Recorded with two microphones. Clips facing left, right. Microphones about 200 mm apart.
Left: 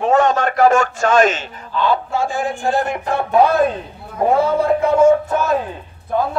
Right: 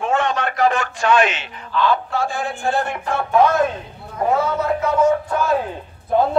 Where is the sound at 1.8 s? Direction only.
10° left (ahead or behind).